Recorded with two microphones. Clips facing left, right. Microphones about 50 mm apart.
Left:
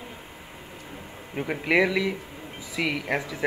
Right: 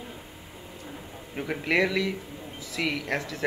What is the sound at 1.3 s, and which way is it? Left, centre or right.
A man's voice, centre.